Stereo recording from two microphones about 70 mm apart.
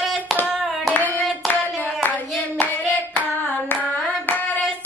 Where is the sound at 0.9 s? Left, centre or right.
Left.